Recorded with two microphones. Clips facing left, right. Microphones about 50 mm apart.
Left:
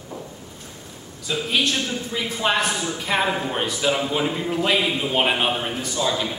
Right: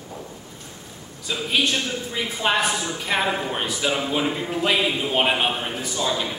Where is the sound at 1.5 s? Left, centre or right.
Centre.